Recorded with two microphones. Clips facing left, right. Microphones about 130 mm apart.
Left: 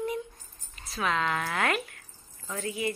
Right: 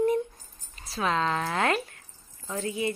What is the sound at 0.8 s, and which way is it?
A woman's voice, 30° right (ahead or behind).